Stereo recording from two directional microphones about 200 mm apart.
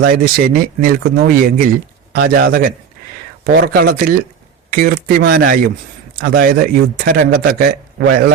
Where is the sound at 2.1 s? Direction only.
50° right (ahead or behind).